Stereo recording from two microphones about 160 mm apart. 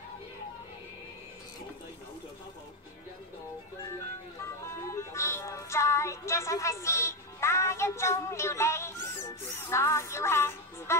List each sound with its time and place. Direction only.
4.6 s music: 20° left (ahead or behind)